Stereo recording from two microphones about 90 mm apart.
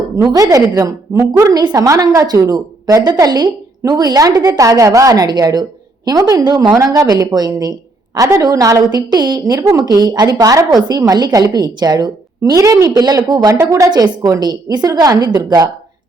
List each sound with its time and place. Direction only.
0.2 s a woman's voice: 45° right (ahead or behind)
9.4 s a woman's voice: 40° right (ahead or behind)
12.5 s a woman's voice: 35° right (ahead or behind)